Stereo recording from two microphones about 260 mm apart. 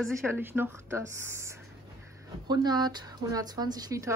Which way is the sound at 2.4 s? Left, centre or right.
Centre.